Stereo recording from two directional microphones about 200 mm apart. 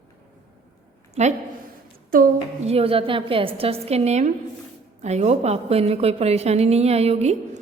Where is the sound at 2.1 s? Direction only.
45° right (ahead or behind).